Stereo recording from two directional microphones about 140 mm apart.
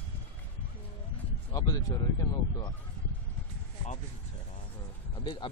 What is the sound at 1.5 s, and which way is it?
Speech, 25° left (ahead or behind).